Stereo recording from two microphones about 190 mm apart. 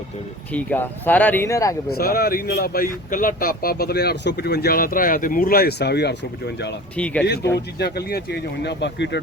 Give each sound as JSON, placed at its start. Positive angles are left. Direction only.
{"t": 0.5, "sound": "speech", "side_deg": 10}
{"t": 1.9, "sound": "speech", "side_deg": 50}
{"t": 6.9, "sound": "speech", "side_deg": 5}
{"t": 7.5, "sound": "speech", "side_deg": 60}